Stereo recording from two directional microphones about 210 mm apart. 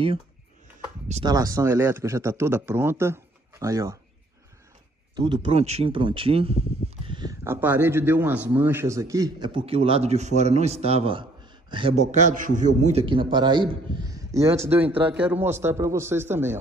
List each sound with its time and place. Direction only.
1.2 s speech: 15° right (ahead or behind)
5.1 s a man's voice: 20° right (ahead or behind)
14.7 s speech: 10° right (ahead or behind)